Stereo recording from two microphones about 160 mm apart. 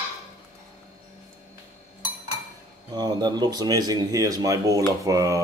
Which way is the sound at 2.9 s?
25° right (ahead or behind).